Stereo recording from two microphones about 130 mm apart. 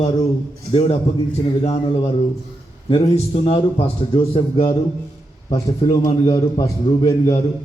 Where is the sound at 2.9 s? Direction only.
50° left (ahead or behind).